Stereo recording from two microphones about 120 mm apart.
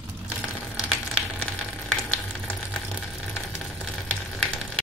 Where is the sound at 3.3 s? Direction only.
Centre (ahead or behind).